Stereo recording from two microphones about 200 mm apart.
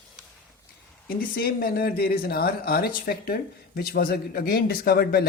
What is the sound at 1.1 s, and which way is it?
Speech, 45° left (ahead or behind).